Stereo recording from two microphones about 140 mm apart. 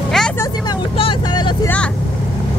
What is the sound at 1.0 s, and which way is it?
Vehicle, 40° left (ahead or behind).